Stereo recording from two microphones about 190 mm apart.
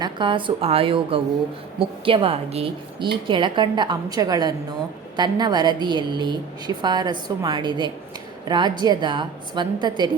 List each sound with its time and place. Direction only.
0.0 s a woman's voice: 25° right (ahead or behind)